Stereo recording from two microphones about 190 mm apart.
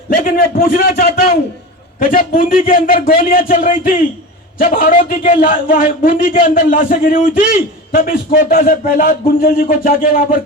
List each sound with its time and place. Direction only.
0.3 s a man's voice: 50° left (ahead or behind)